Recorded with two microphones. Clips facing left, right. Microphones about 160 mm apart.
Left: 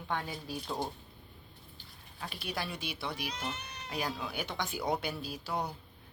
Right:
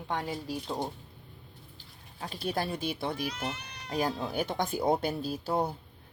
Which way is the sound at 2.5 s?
45° right (ahead or behind).